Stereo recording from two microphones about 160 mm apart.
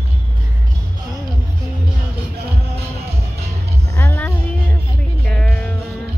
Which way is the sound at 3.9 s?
10° left (ahead or behind).